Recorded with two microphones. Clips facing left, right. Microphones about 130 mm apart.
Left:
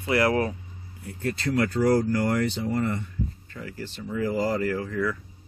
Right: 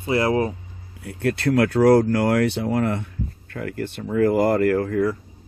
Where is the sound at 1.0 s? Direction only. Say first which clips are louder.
Right 7 dB; 70° right (ahead or behind).